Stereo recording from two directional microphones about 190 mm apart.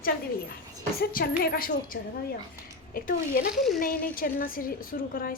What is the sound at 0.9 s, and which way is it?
A woman's voice, 55° left (ahead or behind).